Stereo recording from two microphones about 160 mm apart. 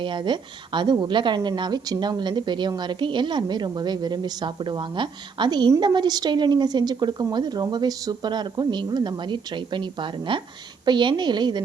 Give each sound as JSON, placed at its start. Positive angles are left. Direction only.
{"t": 0.0, "sound": "speech", "side_deg": -30}